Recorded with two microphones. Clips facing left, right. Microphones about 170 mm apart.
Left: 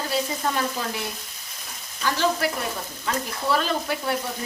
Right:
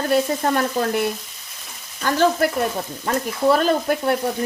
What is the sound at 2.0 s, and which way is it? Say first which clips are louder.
Frying: right 6 dB; 50° right (ahead or behind).